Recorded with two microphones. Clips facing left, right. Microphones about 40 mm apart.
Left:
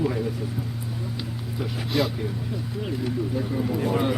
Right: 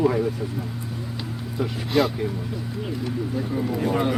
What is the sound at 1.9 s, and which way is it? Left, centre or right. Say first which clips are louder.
Speech: right 4 dB; centre.